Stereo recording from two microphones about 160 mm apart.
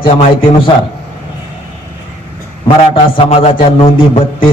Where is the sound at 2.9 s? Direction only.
35° left (ahead or behind).